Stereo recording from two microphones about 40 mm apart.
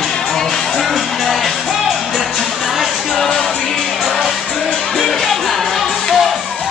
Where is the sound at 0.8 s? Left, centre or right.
Centre.